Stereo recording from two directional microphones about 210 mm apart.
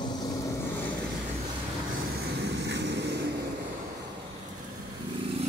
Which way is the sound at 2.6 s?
55° right (ahead or behind).